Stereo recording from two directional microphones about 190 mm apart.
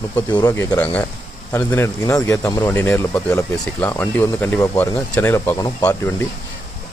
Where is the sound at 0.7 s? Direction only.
10° left (ahead or behind).